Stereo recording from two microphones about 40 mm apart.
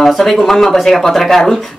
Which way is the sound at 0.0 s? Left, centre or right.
Centre.